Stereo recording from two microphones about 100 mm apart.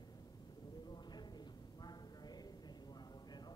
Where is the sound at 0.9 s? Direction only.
45° left (ahead or behind).